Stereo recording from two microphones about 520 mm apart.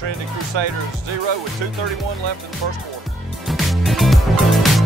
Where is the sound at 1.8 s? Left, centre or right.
Centre.